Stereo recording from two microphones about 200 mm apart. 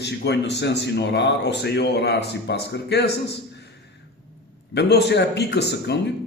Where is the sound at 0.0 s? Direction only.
60° left (ahead or behind).